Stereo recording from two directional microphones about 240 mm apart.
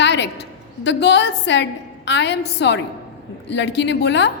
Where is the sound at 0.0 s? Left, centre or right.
Left.